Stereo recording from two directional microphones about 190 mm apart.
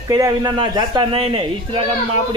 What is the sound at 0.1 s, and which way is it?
Speech, 20° right (ahead or behind).